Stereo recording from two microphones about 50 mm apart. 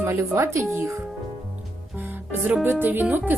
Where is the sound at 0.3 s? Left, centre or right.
Right.